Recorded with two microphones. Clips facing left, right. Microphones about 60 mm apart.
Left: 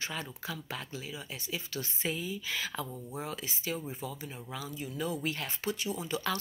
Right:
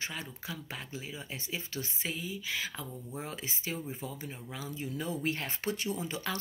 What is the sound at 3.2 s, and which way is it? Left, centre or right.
Speech, right.